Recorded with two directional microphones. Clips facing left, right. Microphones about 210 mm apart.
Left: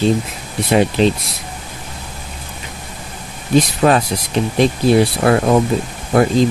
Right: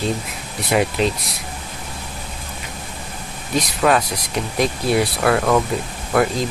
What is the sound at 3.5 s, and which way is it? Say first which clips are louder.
Speech: left 5 dB; 30° left (ahead or behind).